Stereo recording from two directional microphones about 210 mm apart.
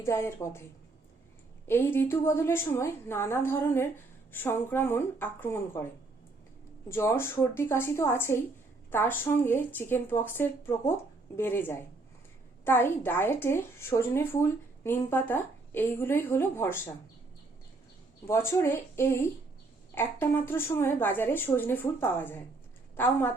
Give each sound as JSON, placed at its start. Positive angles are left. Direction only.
{"t": 0.0, "sound": "speech", "side_deg": 10}
{"t": 1.6, "sound": "speech", "side_deg": 10}
{"t": 6.8, "sound": "speech", "side_deg": 15}
{"t": 18.3, "sound": "speech", "side_deg": 10}